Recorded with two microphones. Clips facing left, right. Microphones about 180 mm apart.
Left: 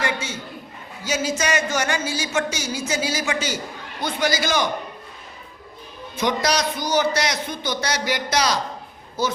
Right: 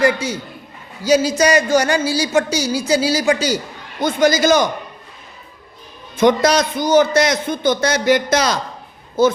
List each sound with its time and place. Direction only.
0.0 s a man's voice: 35° right (ahead or behind)
6.1 s a man's voice: 50° right (ahead or behind)